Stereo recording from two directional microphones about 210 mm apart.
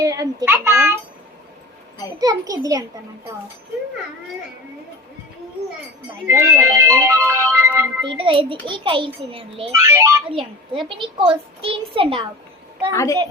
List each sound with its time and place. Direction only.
0.0 s a child's voice: 15° right (ahead or behind)
2.1 s a child's voice: 15° right (ahead or behind)
6.2 s music: 10° right (ahead or behind)
8.1 s a child's voice: 25° right (ahead or behind)
12.9 s a child's voice: 15° left (ahead or behind)